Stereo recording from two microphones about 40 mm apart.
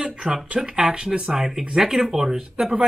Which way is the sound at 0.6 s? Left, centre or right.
Centre.